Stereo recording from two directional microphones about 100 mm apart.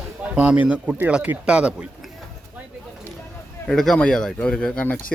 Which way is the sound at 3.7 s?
5° left (ahead or behind).